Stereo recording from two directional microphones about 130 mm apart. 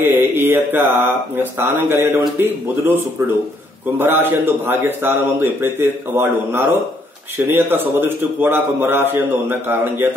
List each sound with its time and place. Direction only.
0.0 s speech: 15° right (ahead or behind)
4.0 s speech: 15° right (ahead or behind)